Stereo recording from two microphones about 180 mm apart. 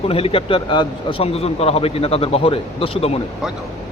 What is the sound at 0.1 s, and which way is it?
A man's voice, 30° left (ahead or behind).